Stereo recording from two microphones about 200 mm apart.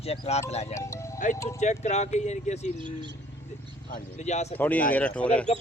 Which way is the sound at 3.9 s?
35° left (ahead or behind).